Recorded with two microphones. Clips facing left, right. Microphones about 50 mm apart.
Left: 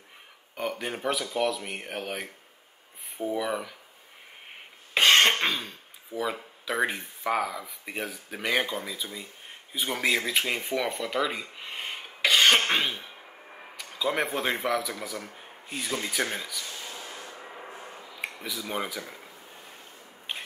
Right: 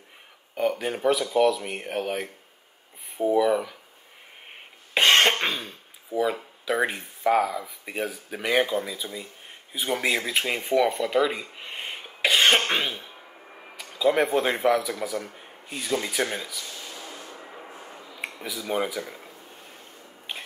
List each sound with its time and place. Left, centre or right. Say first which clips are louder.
0.6 s speech: right 6 dB; centre
3.3 s speech: right 9 dB; centre
4.9 s cough: right 1 dB; right
5.3 s speech: even; centre
10.2 s speech: right 1 dB; centre
11.3 s cough: right 1 dB; centre
13.7 s speech: right 6 dB; centre
16.1 s speech: right 2 dB; centre
16.6 s a sound: even; left
18.2 s a sound: right 1 dB; centre
18.6 s speech: right 6 dB; centre